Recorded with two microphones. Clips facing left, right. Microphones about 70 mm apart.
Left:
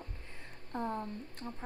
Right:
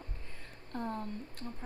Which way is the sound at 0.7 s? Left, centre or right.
Centre.